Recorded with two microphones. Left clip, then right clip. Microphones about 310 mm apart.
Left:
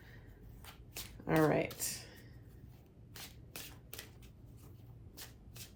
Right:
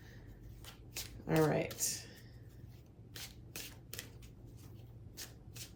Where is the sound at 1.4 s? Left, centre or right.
Left.